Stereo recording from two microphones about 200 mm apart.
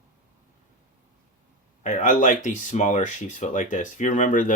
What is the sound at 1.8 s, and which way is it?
Speech, 40° left (ahead or behind).